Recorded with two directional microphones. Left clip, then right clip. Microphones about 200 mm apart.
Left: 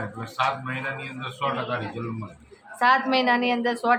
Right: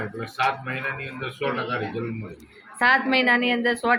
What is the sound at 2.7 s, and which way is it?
A woman's voice, 5° left (ahead or behind).